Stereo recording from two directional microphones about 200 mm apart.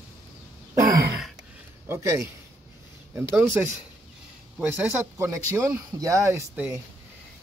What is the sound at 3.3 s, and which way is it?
Speech, 10° right (ahead or behind).